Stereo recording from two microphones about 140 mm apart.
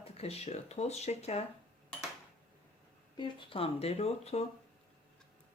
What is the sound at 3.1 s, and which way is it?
Speech, 35° left (ahead or behind).